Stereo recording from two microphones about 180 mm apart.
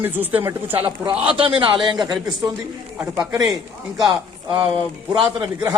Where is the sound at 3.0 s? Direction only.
15° right (ahead or behind).